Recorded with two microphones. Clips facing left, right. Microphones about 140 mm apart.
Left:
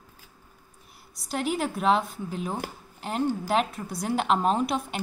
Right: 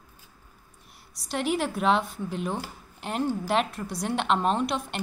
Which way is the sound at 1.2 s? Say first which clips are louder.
Right 1 dB; centre (ahead or behind).